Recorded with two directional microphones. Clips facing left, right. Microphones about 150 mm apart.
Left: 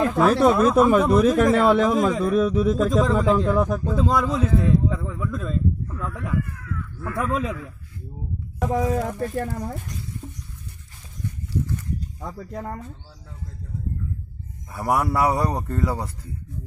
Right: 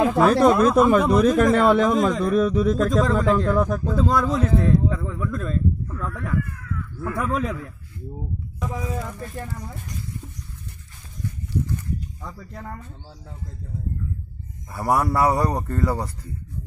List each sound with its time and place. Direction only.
0.0 s speech: 5° right (ahead or behind)
8.5 s speech: 85° left
9.0 s speech: 45° left (ahead or behind)
12.2 s speech: 45° left (ahead or behind)
14.7 s speech: centre (ahead or behind)